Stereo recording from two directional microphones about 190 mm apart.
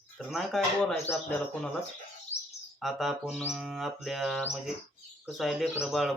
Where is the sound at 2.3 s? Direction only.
35° left (ahead or behind).